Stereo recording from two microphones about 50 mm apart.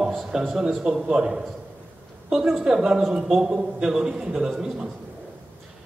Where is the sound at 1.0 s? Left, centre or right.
Centre.